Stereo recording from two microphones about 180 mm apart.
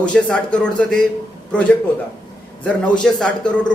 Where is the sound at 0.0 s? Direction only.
5° left (ahead or behind).